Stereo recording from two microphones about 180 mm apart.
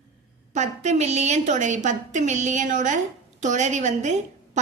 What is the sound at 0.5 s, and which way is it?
A woman's voice, 40° right (ahead or behind).